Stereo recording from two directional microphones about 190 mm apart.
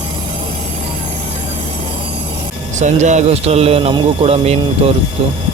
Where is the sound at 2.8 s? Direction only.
40° right (ahead or behind).